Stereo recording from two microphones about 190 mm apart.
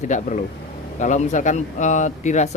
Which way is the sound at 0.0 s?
40° left (ahead or behind).